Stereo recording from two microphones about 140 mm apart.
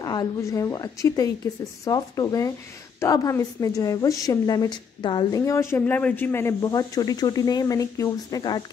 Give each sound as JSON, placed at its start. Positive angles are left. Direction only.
{"t": 0.0, "sound": "speech", "side_deg": 30}
{"t": 5.4, "sound": "speech", "side_deg": 20}